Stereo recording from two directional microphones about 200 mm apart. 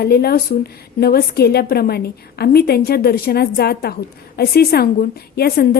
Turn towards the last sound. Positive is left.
turn(degrees=50)  # may be behind; listen again after turning